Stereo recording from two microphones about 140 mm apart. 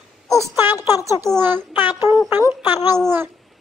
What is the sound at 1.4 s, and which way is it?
Child singing, 15° right (ahead or behind).